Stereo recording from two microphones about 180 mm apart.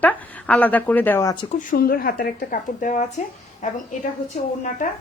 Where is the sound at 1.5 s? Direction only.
55° left (ahead or behind).